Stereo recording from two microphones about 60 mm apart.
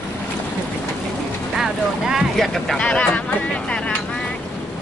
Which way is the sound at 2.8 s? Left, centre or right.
Centre.